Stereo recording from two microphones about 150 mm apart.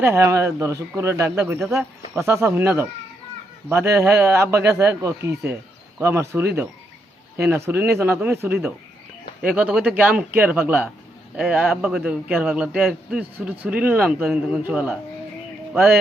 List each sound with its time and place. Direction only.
0.0 s a man's voice: 20° right (ahead or behind)